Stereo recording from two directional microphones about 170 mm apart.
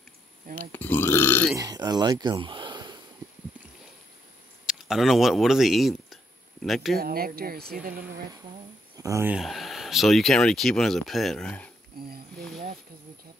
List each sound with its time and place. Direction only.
0.6 s burping: 10° left (ahead or behind)
1.5 s speech: 20° right (ahead or behind)
4.6 s speech: centre (ahead or behind)
7.0 s speech: 60° right (ahead or behind)
8.9 s speech: 20° right (ahead or behind)
9.3 s speech: centre (ahead or behind)
11.9 s a sound: 60° right (ahead or behind)
12.4 s a sound: centre (ahead or behind)